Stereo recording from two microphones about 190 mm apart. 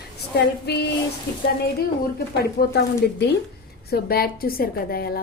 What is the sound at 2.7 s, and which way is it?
A woman's voice, 60° left (ahead or behind).